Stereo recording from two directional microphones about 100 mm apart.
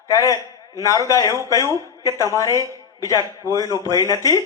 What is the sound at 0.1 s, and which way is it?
A man's voice, 30° left (ahead or behind).